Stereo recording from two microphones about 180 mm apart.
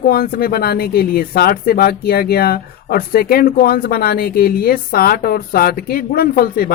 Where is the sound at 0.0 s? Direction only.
55° left (ahead or behind).